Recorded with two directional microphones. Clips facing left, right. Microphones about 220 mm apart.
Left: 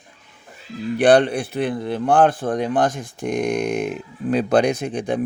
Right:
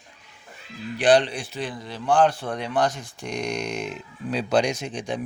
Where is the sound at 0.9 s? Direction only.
60° left (ahead or behind).